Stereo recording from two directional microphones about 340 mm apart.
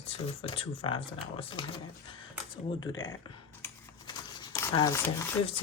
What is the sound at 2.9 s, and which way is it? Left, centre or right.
Speech, centre.